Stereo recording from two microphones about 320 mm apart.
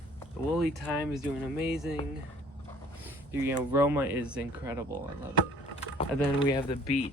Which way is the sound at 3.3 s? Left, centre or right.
Centre.